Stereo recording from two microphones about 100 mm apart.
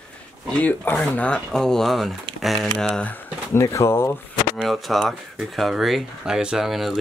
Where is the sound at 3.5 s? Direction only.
30° left (ahead or behind).